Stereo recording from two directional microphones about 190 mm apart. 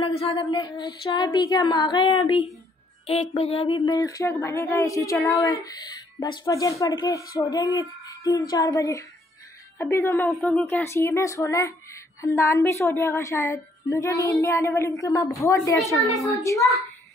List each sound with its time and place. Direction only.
0.1 s speech: 30° left (ahead or behind)
0.5 s female singing: 20° left (ahead or behind)
3.1 s speech: 30° left (ahead or behind); by 10.3 s 15° left (ahead or behind)
10.3 s speech: centre (ahead or behind)
10.8 s speech: 15° left (ahead or behind)